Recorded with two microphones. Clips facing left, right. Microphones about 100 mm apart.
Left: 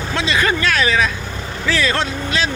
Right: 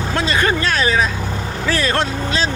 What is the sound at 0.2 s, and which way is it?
Speech, 40° right (ahead or behind).